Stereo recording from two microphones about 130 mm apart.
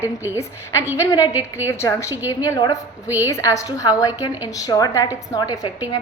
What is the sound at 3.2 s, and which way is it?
A woman's voice, 25° left (ahead or behind).